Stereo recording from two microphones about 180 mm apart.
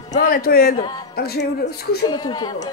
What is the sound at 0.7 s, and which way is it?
Speech, 20° left (ahead or behind).